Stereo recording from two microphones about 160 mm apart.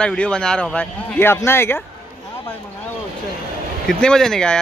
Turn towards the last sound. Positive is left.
turn(degrees=5)  # may be behind; listen again after turning